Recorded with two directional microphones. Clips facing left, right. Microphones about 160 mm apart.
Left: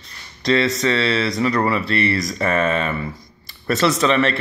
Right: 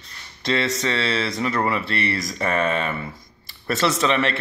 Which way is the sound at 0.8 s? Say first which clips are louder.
Left 4 dB; 20° right (ahead or behind).